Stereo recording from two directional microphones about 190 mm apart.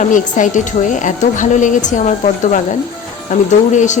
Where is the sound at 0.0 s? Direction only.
40° left (ahead or behind).